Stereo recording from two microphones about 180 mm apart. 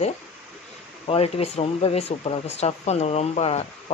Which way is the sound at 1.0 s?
35° left (ahead or behind).